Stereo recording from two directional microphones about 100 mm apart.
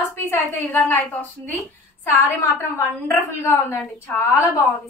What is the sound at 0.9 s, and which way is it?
A woman's voice, 15° left (ahead or behind).